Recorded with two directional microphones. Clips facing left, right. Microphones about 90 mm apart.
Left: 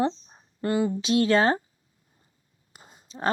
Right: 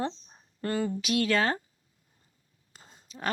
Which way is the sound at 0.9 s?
25° left (ahead or behind).